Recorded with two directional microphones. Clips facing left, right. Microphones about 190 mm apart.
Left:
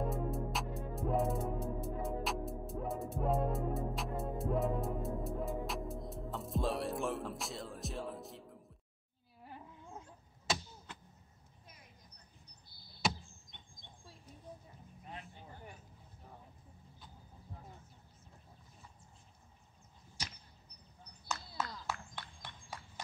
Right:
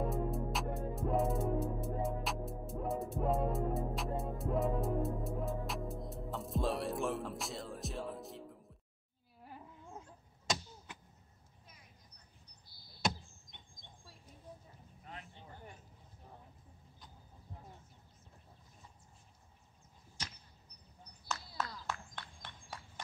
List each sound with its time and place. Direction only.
0.0 s music: centre (ahead or behind)
9.4 s a sound: centre (ahead or behind)
15.0 s vehicle: 15° left (ahead or behind)
21.3 s horse: 5° left (ahead or behind)